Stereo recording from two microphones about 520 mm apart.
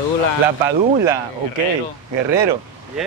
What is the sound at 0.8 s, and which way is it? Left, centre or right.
Speech, centre.